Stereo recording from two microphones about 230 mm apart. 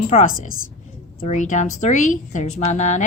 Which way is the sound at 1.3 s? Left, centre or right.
Left.